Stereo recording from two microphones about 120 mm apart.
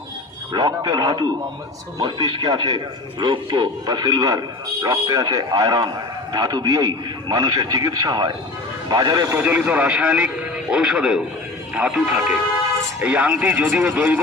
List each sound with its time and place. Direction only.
0.5 s a man's voice: 35° right (ahead or behind)
9.4 s speech: 15° right (ahead or behind)